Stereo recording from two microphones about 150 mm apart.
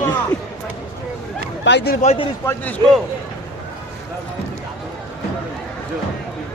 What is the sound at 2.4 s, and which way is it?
Speech, 10° left (ahead or behind).